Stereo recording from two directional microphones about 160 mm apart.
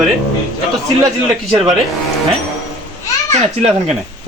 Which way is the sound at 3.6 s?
40° right (ahead or behind).